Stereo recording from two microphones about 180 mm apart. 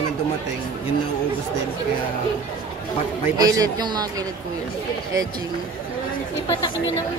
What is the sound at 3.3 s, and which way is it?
Speech, 20° right (ahead or behind).